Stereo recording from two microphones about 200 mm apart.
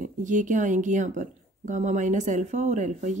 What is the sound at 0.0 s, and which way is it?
Speech, 40° right (ahead or behind).